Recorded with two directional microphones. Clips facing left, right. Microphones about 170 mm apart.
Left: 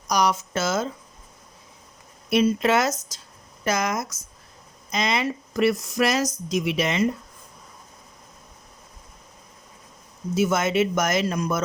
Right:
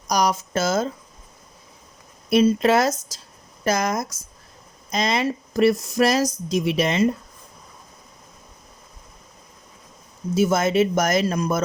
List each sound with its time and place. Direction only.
0.1 s speech: 40° right (ahead or behind)
2.3 s speech: 35° right (ahead or behind)
10.3 s speech: 35° right (ahead or behind)